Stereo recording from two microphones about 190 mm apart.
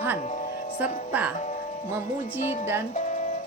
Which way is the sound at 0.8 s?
10° right (ahead or behind).